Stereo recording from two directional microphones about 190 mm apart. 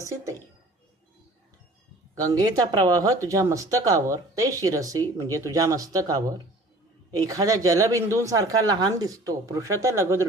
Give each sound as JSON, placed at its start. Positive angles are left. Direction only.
{"t": 2.1, "sound": "speech", "side_deg": -20}